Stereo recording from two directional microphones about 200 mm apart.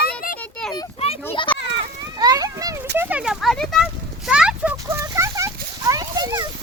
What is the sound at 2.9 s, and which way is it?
Speech, 10° right (ahead or behind).